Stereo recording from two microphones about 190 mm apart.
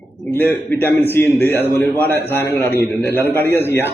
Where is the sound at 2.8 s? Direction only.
10° left (ahead or behind).